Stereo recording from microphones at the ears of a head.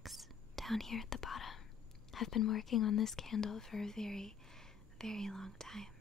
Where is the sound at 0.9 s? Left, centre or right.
Left.